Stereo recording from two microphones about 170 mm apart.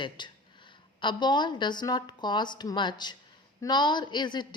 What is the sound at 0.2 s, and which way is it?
A woman's voice, 25° left (ahead or behind).